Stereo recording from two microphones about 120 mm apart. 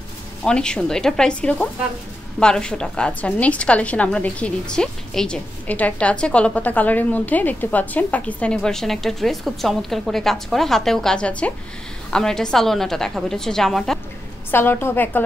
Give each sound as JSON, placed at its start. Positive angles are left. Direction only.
{"t": 0.4, "sound": "a woman's voice", "side_deg": 5}
{"t": 14.5, "sound": "a woman's voice", "side_deg": 20}